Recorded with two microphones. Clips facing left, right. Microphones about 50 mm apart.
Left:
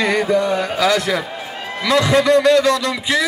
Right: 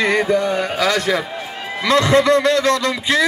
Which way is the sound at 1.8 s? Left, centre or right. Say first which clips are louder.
Right 1 dB; right.